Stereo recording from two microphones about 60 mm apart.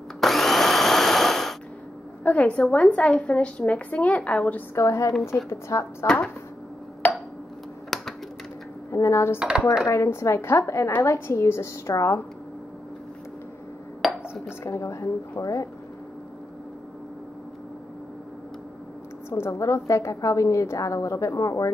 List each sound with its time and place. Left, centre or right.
0.2 s tools: centre
2.2 s a woman's voice: left
4.7 s a woman's voice: left
7.0 s a sound: left
7.9 s typing: centre
8.9 s a woman's voice: left
11.9 s speech: left
14.6 s a woman's voice: left
19.3 s a woman's voice: left